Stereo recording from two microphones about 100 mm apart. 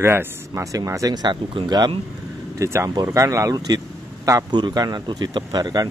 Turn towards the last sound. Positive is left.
turn(degrees=-40)  # may be behind; listen again after turning